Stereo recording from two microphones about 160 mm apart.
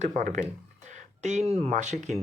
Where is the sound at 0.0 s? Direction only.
50° right (ahead or behind).